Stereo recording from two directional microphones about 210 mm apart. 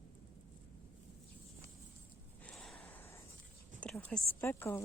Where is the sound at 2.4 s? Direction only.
5° left (ahead or behind).